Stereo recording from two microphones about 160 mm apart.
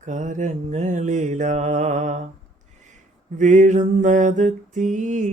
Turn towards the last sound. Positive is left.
turn(degrees=-50)  # may be behind; listen again after turning